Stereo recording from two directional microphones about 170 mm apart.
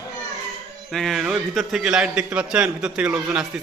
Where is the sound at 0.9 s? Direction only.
Centre (ahead or behind).